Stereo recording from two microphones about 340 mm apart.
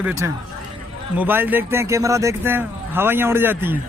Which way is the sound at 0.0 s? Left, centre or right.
Centre.